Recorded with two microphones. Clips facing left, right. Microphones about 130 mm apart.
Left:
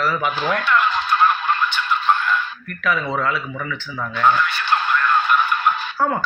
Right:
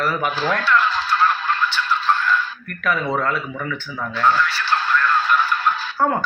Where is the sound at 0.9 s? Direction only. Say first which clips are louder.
Left 1 dB; 20° left (ahead or behind).